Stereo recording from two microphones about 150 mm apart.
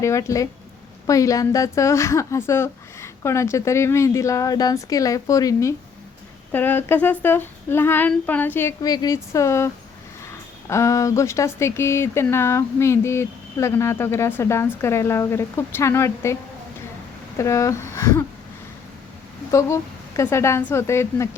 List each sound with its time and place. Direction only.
0.0 s a woman's voice: 20° left (ahead or behind)
19.5 s a woman's voice: 20° left (ahead or behind)